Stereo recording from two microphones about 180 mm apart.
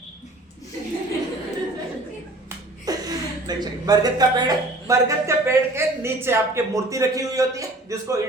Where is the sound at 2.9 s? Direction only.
20° right (ahead or behind).